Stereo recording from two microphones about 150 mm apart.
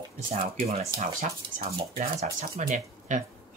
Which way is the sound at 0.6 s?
45° right (ahead or behind).